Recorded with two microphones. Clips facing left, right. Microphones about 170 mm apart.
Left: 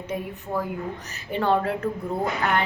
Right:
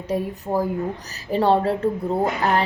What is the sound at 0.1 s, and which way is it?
A woman's voice, 35° right (ahead or behind).